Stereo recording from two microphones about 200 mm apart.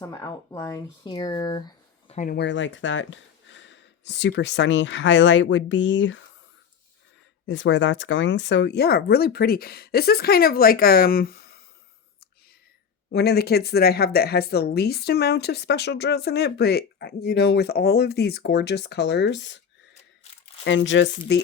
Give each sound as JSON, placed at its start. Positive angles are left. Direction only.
{"t": 0.0, "sound": "speech", "side_deg": 15}
{"t": 2.1, "sound": "speech", "side_deg": 45}
{"t": 2.4, "sound": "speech", "side_deg": 65}
{"t": 7.4, "sound": "speech", "side_deg": 65}
{"t": 13.1, "sound": "speech", "side_deg": 55}
{"t": 20.7, "sound": "speech", "side_deg": 65}